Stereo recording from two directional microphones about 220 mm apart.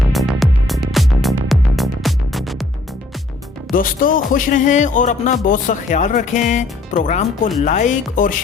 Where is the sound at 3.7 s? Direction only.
40° left (ahead or behind).